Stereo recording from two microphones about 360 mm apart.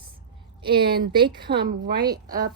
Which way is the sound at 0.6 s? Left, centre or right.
Right.